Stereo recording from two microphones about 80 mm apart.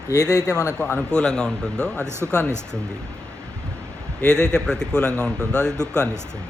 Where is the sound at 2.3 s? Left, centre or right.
Centre.